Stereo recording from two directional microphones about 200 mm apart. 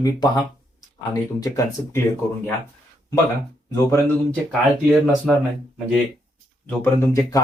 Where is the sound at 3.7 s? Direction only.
15° left (ahead or behind).